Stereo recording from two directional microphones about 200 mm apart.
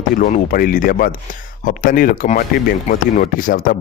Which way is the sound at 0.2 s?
40° left (ahead or behind).